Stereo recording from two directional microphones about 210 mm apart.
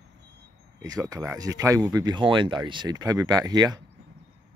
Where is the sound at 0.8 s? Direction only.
15° right (ahead or behind).